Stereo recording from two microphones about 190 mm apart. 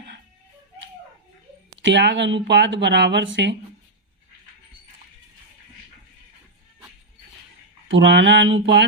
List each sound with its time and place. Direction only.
1.8 s speech: 70° right (ahead or behind)
7.9 s speech: 75° right (ahead or behind)